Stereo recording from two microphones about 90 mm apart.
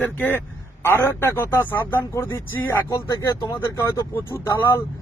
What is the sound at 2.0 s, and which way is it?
Speech, 35° left (ahead or behind).